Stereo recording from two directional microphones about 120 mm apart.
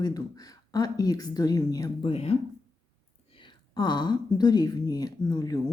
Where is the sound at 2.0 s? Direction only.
55° left (ahead or behind).